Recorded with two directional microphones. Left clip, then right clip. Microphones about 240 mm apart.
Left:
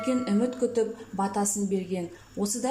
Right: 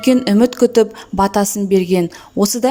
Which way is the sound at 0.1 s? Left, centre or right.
Right.